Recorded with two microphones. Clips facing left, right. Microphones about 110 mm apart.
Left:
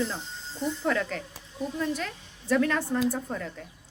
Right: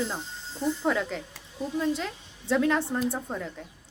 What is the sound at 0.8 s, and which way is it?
A woman's voice, 15° right (ahead or behind).